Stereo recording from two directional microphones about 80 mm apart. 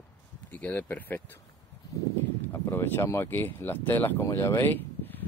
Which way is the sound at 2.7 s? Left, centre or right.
Left.